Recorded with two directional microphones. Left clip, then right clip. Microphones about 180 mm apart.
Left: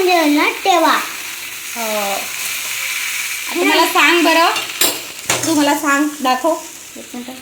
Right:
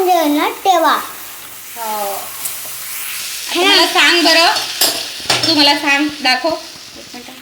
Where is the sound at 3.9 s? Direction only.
50° left (ahead or behind).